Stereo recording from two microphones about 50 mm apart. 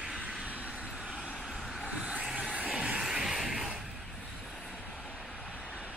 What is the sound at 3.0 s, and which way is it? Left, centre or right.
Music, centre.